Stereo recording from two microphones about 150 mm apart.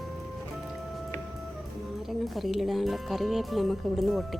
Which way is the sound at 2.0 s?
Centre (ahead or behind).